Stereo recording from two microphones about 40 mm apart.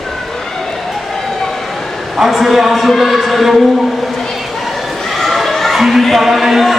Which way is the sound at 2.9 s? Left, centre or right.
Centre.